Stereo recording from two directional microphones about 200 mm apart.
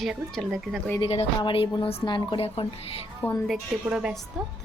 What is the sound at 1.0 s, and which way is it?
A woman's voice, 30° left (ahead or behind).